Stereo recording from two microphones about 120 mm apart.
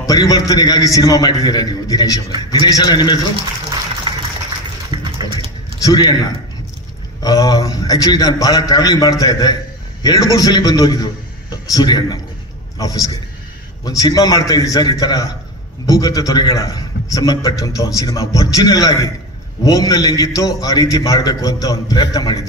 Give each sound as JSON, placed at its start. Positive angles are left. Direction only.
{"t": 0.0, "sound": "a man's voice", "side_deg": 30}
{"t": 4.1, "sound": "a sound", "side_deg": -40}
{"t": 4.9, "sound": "dog", "side_deg": -50}
{"t": 5.8, "sound": "a man's voice", "side_deg": 30}